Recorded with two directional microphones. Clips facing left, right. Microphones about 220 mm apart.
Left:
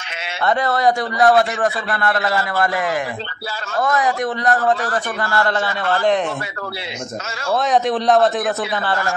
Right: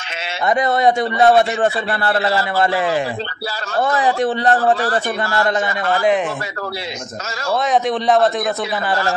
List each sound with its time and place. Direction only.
0.5 s a man's voice: 20° right (ahead or behind)
3.8 s a man's voice: 30° right (ahead or behind); by 6.1 s 10° right (ahead or behind)
7.5 s a man's voice: centre (ahead or behind)